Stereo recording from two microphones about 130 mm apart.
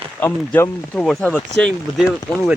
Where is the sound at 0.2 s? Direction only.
15° left (ahead or behind).